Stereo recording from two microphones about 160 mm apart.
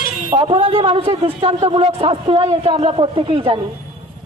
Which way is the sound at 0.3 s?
35° right (ahead or behind).